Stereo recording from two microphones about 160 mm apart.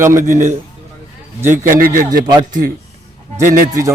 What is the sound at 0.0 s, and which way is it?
Speech, 20° right (ahead or behind).